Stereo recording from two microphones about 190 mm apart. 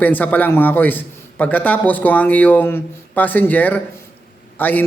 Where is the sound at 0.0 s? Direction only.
10° left (ahead or behind).